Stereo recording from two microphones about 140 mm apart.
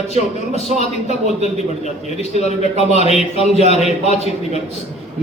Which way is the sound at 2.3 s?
50° left (ahead or behind).